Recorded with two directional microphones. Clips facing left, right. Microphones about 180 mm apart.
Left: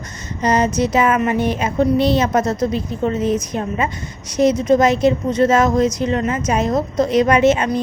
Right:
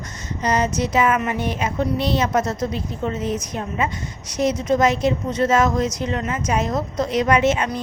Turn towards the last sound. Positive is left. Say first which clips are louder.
# left 4 dB
turn(degrees=30)  # may be behind; listen again after turning